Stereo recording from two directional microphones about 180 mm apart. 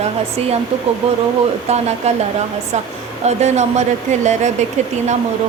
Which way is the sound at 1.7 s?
35° right (ahead or behind).